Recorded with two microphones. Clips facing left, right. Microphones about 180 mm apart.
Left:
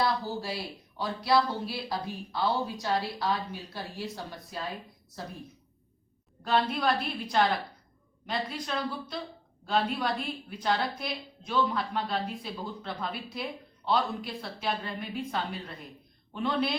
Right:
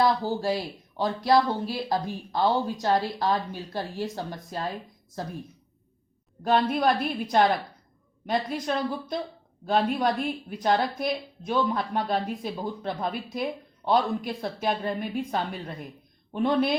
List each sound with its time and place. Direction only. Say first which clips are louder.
0.0 s a woman's voice: right 6 dB; 45° right (ahead or behind)
6.4 s a woman's voice: right 5 dB; 50° right (ahead or behind)